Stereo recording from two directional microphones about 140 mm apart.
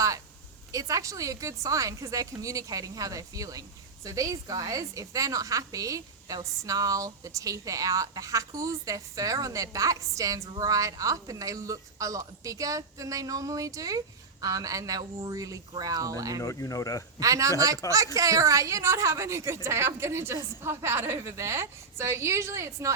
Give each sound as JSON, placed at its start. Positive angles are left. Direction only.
{"t": 0.7, "sound": "a woman's voice", "side_deg": -25}
{"t": 16.4, "sound": "speech", "side_deg": 25}
{"t": 17.2, "sound": "a woman's voice", "side_deg": -25}